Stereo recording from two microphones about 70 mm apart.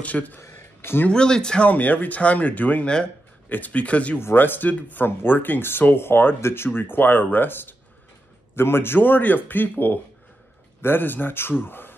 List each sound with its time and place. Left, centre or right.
0.0 s speech: left
0.4 s a sound: left
1.0 s speech: centre
1.7 s speech: left
4.2 s speech: left